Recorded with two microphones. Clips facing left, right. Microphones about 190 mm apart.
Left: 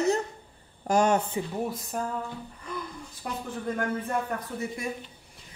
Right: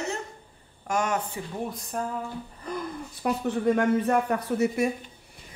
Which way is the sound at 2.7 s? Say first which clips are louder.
Right 4 dB; 40° right (ahead or behind).